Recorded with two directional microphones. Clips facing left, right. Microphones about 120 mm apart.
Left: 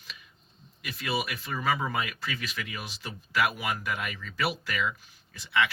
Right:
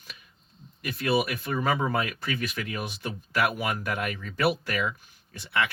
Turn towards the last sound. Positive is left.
turn(degrees=-55)  # may be behind; listen again after turning